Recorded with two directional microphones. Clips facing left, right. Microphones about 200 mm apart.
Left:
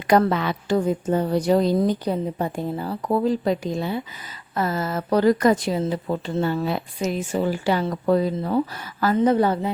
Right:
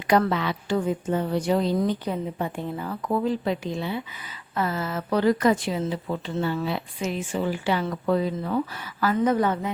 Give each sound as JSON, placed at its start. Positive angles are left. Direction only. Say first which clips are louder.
{"t": 0.1, "sound": "speech", "louder": "left 3 dB", "side_deg": 45}
{"t": 9.1, "sound": "a woman's voice", "louder": "left 4 dB", "side_deg": 30}